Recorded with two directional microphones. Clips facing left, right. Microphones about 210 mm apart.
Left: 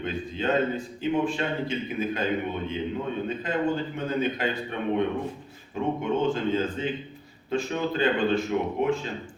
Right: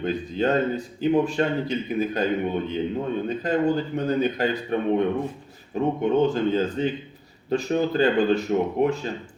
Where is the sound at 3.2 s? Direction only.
40° right (ahead or behind).